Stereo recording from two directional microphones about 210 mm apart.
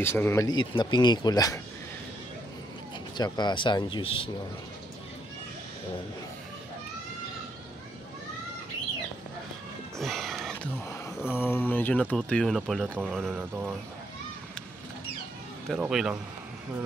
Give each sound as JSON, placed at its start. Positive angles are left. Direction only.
{"t": 0.0, "sound": "speech", "side_deg": 10}
{"t": 3.2, "sound": "speech", "side_deg": 20}
{"t": 9.9, "sound": "a sound", "side_deg": 0}
{"t": 15.7, "sound": "speech", "side_deg": 0}